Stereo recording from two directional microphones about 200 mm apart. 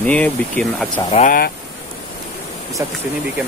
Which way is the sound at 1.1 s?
45° left (ahead or behind).